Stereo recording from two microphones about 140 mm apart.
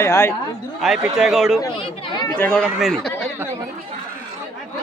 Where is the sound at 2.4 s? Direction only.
15° left (ahead or behind).